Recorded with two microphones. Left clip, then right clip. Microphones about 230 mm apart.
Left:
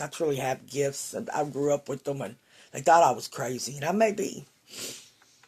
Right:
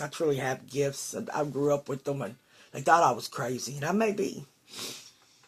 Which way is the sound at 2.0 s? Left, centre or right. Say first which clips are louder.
Left 1 dB; left.